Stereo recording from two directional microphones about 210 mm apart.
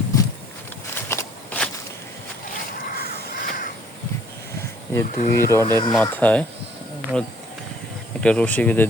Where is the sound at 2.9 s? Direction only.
45° left (ahead or behind).